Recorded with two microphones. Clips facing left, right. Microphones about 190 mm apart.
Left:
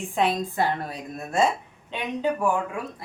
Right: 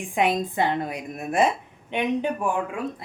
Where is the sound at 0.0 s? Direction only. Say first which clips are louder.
Right 1 dB; 15° right (ahead or behind).